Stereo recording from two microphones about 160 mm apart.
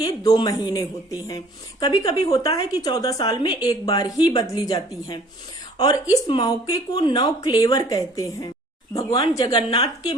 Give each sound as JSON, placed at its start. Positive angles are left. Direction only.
{"t": 0.0, "sound": "speech", "side_deg": 25}